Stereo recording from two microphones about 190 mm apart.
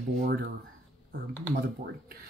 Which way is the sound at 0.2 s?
60° right (ahead or behind).